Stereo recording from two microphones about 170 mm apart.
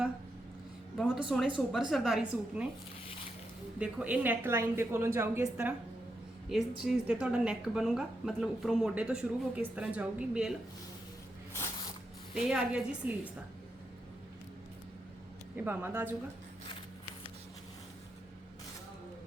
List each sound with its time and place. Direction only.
0.9 s a woman's voice: centre (ahead or behind)
3.8 s a woman's voice: 5° right (ahead or behind)
6.5 s a woman's voice: 5° right (ahead or behind)
11.5 s spray: 15° left (ahead or behind)
12.3 s a woman's voice: 5° right (ahead or behind)
15.5 s a woman's voice: 10° right (ahead or behind)